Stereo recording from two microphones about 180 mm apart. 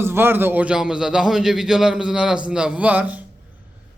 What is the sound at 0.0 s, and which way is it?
A man's voice, 15° right (ahead or behind).